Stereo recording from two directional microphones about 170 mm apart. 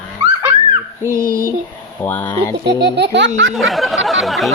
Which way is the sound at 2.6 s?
75° right (ahead or behind).